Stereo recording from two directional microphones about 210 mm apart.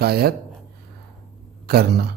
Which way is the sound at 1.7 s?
50° right (ahead or behind).